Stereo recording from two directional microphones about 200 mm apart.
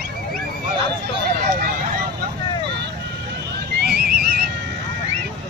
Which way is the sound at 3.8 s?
55° right (ahead or behind).